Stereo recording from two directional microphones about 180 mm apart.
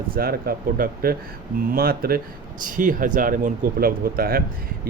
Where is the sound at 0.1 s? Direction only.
55° right (ahead or behind).